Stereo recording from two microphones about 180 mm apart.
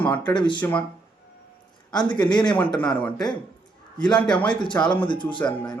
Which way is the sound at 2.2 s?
5° left (ahead or behind).